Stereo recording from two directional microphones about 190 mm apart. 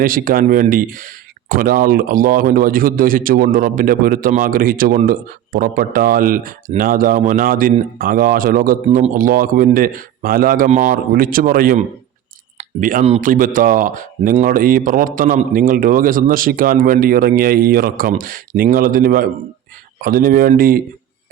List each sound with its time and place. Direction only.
0.0 s speech: 50° right (ahead or behind)